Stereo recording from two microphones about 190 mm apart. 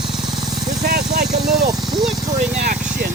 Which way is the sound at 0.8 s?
60° right (ahead or behind).